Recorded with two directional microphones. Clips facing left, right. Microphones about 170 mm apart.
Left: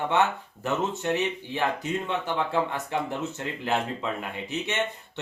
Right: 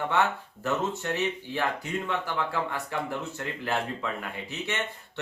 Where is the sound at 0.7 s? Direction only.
20° left (ahead or behind).